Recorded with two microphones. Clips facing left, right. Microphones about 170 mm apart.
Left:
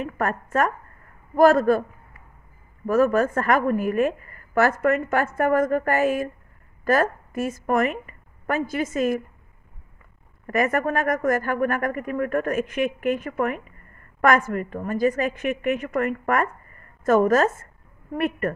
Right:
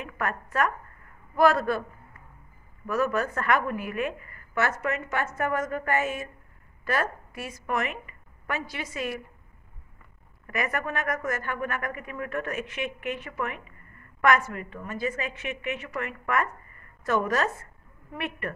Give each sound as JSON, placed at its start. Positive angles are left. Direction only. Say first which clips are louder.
{"t": 0.0, "sound": "a woman's voice", "louder": "left 6 dB", "side_deg": 40}
{"t": 2.9, "sound": "speech", "louder": "left 7 dB", "side_deg": 45}
{"t": 4.8, "sound": "a woman's voice", "louder": "left 8 dB", "side_deg": 55}
{"t": 10.4, "sound": "speech", "louder": "left 8 dB", "side_deg": 45}